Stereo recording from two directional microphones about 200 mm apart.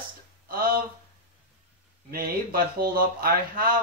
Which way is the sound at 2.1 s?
50° right (ahead or behind).